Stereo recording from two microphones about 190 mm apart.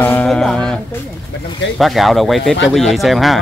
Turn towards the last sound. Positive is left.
turn(degrees=0)  # may be behind; listen again after turning